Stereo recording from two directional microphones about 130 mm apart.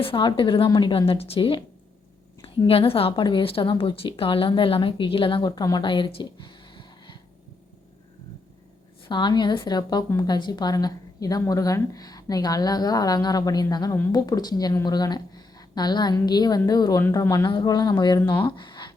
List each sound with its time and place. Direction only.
0.0 s a woman's voice: 40° left (ahead or behind)
9.0 s a woman's voice: 35° left (ahead or behind)
18.4 s a sound: 35° left (ahead or behind)